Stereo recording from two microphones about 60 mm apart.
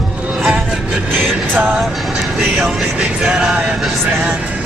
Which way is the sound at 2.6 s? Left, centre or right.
Centre.